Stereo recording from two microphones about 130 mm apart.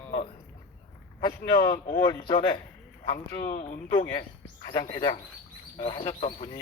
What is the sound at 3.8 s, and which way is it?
Speech, 40° left (ahead or behind).